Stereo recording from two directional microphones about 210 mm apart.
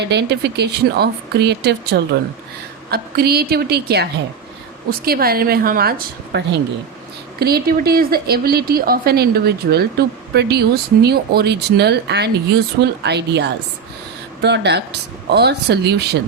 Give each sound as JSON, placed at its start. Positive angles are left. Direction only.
{"t": 0.0, "sound": "speech", "side_deg": -55}